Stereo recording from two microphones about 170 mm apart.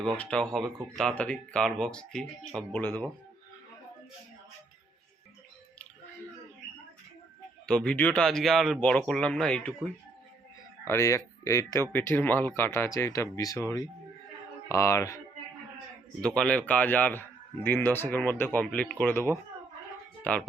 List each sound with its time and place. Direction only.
0.2 s speech: 5° left (ahead or behind)
7.7 s speech: 5° left (ahead or behind)
10.8 s speech: 15° left (ahead or behind)
16.2 s speech: 5° left (ahead or behind)
20.3 s speech: 10° left (ahead or behind)